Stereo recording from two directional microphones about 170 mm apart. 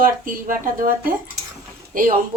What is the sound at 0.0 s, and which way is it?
Dishes, 55° right (ahead or behind).